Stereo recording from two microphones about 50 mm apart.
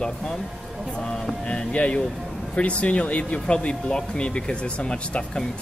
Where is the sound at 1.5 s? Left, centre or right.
Left.